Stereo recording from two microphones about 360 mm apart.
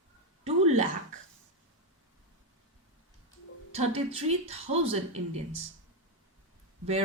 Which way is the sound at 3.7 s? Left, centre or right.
Centre.